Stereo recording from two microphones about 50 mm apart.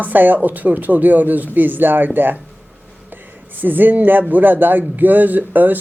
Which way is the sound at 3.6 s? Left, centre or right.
Right.